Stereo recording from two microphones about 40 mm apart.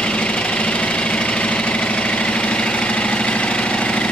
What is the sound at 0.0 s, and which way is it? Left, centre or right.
Engine, left.